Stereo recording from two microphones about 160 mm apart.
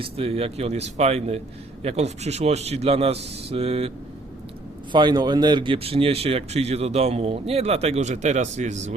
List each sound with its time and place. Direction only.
0.0 s speech: 40° right (ahead or behind)
4.9 s speech: 30° right (ahead or behind); by 8.9 s 45° right (ahead or behind)